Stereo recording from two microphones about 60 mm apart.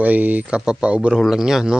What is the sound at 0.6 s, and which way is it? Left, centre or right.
Speech, centre.